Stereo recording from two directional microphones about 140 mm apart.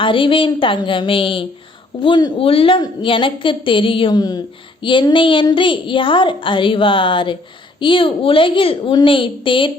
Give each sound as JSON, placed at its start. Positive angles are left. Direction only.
{"t": 0.0, "sound": "a woman's voice", "side_deg": 40}